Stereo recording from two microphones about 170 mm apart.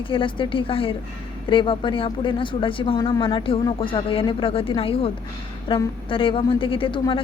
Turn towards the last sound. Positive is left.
turn(degrees=30)  # may be behind; listen again after turning